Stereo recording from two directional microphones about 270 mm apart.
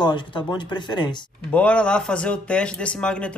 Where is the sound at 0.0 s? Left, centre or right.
Centre.